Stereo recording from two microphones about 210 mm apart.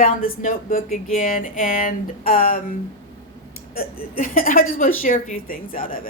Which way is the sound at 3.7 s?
40° left (ahead or behind).